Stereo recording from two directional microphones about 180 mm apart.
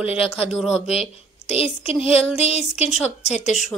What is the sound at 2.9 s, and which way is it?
Speech, 5° right (ahead or behind).